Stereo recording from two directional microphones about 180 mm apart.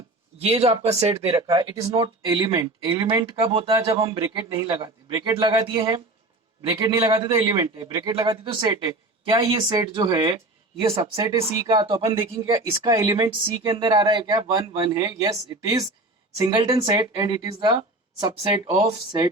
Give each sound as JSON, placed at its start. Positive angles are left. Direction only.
{"t": 0.3, "sound": "speech", "side_deg": -35}
{"t": 1.4, "sound": "speech", "side_deg": -20}
{"t": 7.0, "sound": "speech", "side_deg": -30}
{"t": 11.2, "sound": "speech", "side_deg": -20}